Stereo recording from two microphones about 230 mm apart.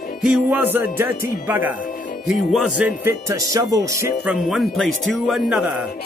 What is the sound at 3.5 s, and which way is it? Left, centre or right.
Music, centre.